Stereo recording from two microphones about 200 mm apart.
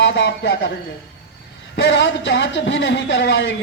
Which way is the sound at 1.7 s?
60° left (ahead or behind).